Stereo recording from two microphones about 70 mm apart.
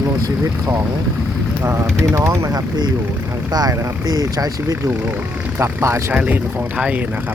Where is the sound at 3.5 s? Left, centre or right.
Right.